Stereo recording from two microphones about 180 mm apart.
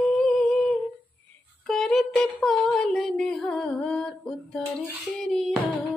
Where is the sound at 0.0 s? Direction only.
5° left (ahead or behind).